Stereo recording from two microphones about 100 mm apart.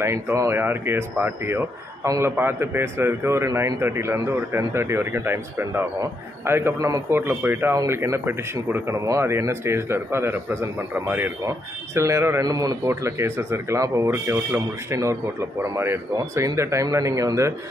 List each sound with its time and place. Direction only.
0.0 s a man's voice: 30° right (ahead or behind)
12.4 s speech: 40° right (ahead or behind)
12.8 s a man's voice: 25° right (ahead or behind)